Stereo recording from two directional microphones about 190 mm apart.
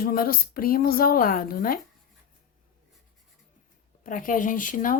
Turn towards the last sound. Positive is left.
turn(degrees=45)  # may be behind; listen again after turning